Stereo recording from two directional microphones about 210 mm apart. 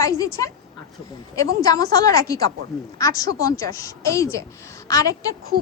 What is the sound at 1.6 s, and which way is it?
A woman's voice, 15° left (ahead or behind).